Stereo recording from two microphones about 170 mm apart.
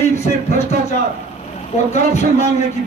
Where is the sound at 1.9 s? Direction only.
40° left (ahead or behind).